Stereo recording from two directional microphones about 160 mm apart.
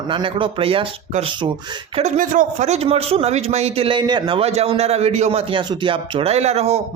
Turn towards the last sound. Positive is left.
turn(degrees=-45)  # may be behind; listen again after turning